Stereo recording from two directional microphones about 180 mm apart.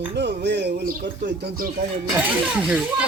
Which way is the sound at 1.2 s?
70° right (ahead or behind).